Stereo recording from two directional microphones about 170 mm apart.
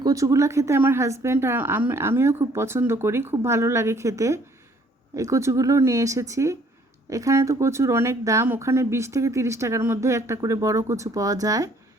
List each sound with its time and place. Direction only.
0.0 s speech: 20° right (ahead or behind)